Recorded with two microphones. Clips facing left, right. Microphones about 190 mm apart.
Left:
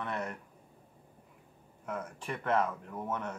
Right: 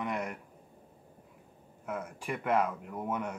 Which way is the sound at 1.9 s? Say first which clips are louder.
Right 2 dB; 10° right (ahead or behind).